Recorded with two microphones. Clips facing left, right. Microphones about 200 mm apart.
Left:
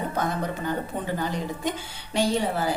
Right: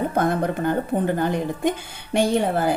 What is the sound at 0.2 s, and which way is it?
A woman's voice, 55° right (ahead or behind).